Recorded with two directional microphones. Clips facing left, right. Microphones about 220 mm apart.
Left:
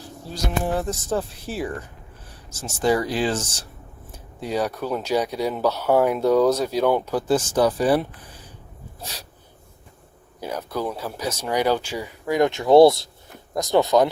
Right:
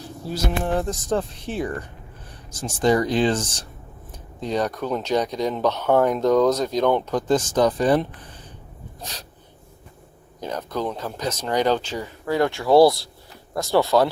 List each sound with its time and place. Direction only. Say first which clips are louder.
0.6 s speech: right 1 dB; 5° left (ahead or behind)
10.4 s speech: even; 10° left (ahead or behind)